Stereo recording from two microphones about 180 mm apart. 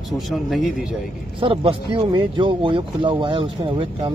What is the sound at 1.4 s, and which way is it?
Speech, 30° right (ahead or behind).